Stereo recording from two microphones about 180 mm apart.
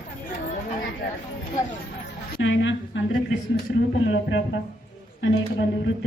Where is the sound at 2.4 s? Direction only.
90° left.